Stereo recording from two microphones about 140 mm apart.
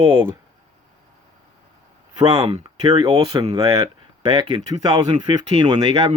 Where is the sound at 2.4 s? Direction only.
45° right (ahead or behind).